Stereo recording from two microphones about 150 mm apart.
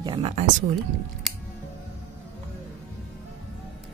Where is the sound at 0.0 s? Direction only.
40° right (ahead or behind).